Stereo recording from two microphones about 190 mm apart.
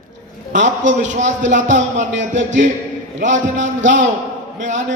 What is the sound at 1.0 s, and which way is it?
A man's voice, 40° right (ahead or behind).